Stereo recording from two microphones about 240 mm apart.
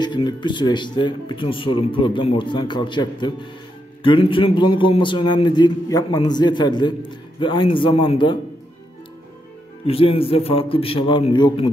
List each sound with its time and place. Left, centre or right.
0.0 s speech: centre
9.8 s speech: left